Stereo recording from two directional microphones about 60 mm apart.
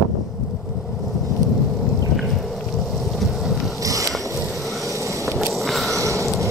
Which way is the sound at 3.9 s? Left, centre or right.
Right.